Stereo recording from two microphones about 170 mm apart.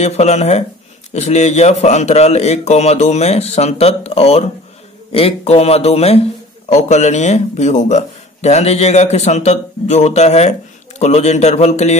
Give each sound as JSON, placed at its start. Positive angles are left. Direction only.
{"t": 0.0, "sound": "speech", "side_deg": 40}